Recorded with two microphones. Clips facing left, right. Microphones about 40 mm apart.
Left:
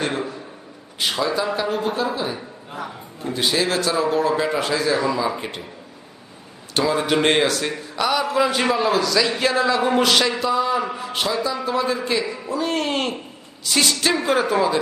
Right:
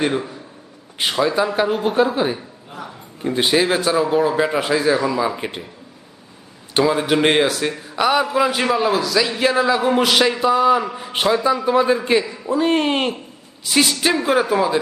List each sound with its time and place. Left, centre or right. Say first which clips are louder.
1.2 s a man's voice: right 5 dB; centre
2.1 s a man's voice: right 5 dB; right; by 4.9 s centre
4.9 s speech: right 1 dB; centre
5.4 s a man's voice: right 3 dB; centre
6.7 s a man's voice: right 3 dB; centre
7.9 s speech: right 4 dB; centre
8.4 s a man's voice: right 1 dB; centre
10.4 s speech: right 5 dB; right
13.7 s a man's voice: right 2 dB; centre